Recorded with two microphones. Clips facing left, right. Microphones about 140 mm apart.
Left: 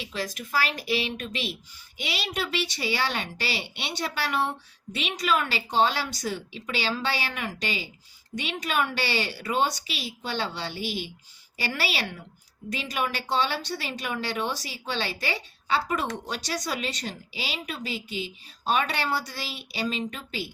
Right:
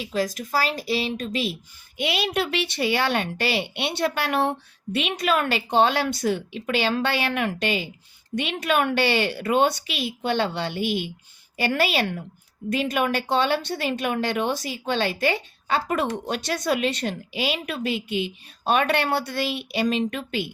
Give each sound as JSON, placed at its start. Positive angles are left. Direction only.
{"t": 0.0, "sound": "a woman's voice", "side_deg": -45}
{"t": 2.0, "sound": "speech", "side_deg": -55}